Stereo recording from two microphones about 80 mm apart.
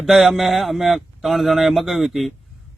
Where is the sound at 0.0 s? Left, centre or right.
Centre.